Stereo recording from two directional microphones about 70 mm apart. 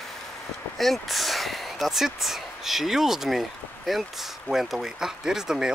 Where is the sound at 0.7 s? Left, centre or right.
Centre.